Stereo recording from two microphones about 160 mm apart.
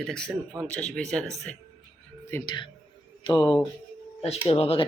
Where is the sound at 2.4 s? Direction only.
30° left (ahead or behind).